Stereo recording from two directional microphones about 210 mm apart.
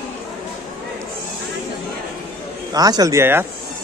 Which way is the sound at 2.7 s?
15° right (ahead or behind).